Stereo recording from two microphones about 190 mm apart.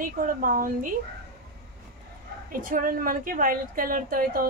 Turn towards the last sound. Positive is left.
turn(degrees=-50)  # may be behind; listen again after turning